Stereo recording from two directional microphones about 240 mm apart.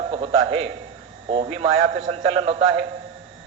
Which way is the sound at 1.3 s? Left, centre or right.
Right.